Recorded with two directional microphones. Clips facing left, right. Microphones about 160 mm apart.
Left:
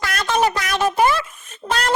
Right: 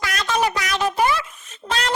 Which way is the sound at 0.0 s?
50° left (ahead or behind).